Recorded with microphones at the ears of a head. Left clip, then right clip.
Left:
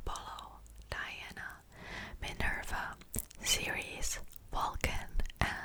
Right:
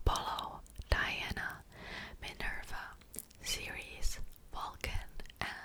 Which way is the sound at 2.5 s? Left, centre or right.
Left.